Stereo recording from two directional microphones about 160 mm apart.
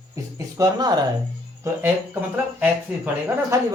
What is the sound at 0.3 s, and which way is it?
Speech, 20° right (ahead or behind).